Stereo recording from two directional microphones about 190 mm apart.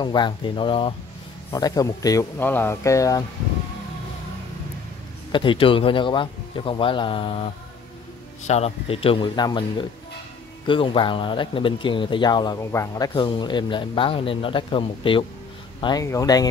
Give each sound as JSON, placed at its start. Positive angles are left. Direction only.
{"t": 0.0, "sound": "speech", "side_deg": 25}
{"t": 5.3, "sound": "speech", "side_deg": 25}
{"t": 8.5, "sound": "speech", "side_deg": 35}